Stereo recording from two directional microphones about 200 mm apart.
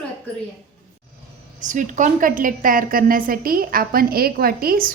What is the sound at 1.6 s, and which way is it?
A woman's voice, 40° right (ahead or behind).